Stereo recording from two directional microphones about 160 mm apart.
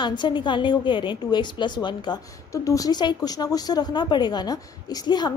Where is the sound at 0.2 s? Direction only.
30° left (ahead or behind).